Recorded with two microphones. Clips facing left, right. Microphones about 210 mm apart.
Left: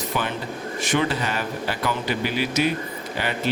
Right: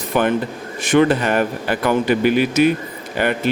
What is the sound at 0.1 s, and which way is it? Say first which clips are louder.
Speech: right 12 dB; 55° right (ahead or behind).